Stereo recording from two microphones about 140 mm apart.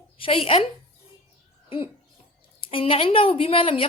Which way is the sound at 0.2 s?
40° left (ahead or behind).